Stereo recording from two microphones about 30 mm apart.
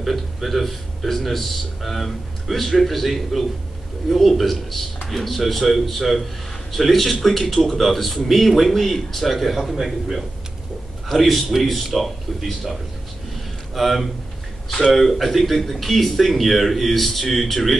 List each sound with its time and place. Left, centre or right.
0.0 s speech: centre
13.7 s speech: centre